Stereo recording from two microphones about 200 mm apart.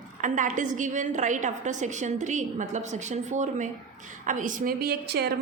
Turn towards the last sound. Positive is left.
turn(degrees=-55)  # may be behind; listen again after turning